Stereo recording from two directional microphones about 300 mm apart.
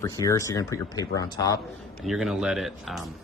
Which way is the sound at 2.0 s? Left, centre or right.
Centre.